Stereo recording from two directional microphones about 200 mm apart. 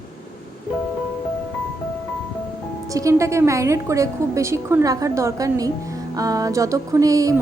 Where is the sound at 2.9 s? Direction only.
15° right (ahead or behind).